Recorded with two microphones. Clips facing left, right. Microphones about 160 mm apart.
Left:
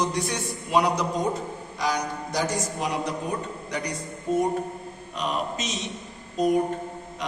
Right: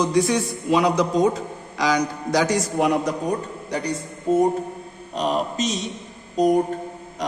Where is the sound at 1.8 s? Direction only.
90° right.